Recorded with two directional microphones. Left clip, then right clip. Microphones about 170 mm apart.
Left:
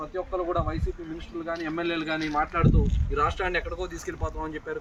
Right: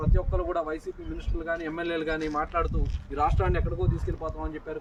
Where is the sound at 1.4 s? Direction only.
40° right (ahead or behind).